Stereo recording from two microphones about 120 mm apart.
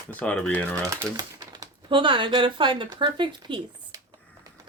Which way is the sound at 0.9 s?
30° right (ahead or behind).